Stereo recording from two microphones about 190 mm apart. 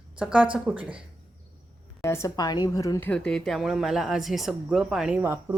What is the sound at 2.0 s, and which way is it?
A woman's voice, 15° left (ahead or behind).